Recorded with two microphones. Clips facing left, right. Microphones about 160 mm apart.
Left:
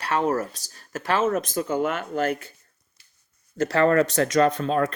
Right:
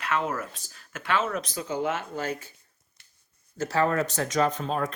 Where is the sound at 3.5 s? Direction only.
65° left (ahead or behind).